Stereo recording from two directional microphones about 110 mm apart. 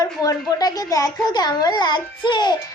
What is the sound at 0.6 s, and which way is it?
A child's voice, 35° left (ahead or behind).